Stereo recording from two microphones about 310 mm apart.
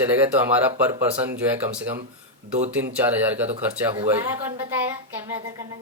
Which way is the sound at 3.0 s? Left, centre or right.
Centre.